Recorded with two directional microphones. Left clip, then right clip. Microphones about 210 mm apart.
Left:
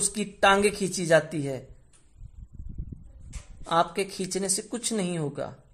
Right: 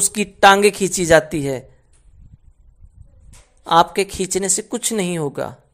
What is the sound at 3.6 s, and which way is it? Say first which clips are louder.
A man's voice: right 10 dB; 25° right (ahead or behind).